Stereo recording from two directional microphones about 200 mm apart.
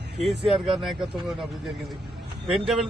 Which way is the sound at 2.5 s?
Centre (ahead or behind).